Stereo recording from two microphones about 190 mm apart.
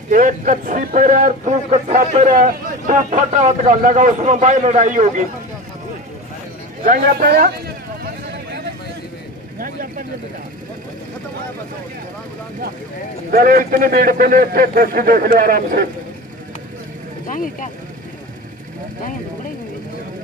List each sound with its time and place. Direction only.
0.1 s a man's voice: 40° right (ahead or behind)
6.9 s a sound: 50° right (ahead or behind)
9.6 s vehicle: 45° right (ahead or behind)
13.3 s a man's voice: 50° right (ahead or behind)
17.3 s speech: 45° left (ahead or behind)